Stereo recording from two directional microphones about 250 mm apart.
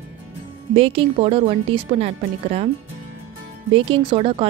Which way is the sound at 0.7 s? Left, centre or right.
Right.